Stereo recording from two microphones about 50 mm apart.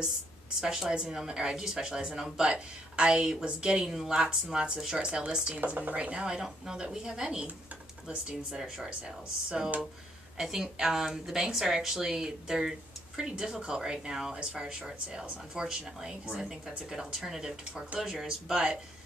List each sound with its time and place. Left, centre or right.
0.6 s speech: centre
3.9 s speech: centre
4.2 s speech: centre
5.7 s speech: right
5.9 s speech: right
6.2 s speech: centre
8.5 s speech: centre